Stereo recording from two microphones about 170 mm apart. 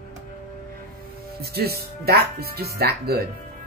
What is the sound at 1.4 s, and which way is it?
Speech, 65° right (ahead or behind).